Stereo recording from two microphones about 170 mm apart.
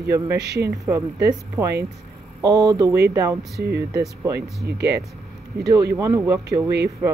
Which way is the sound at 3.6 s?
70° right (ahead or behind).